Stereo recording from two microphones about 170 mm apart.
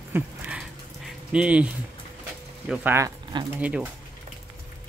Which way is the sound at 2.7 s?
10° right (ahead or behind).